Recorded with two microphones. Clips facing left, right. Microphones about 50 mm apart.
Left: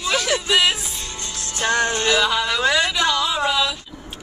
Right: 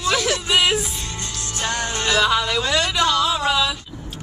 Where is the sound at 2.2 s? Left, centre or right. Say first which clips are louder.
Right 1 dB; centre.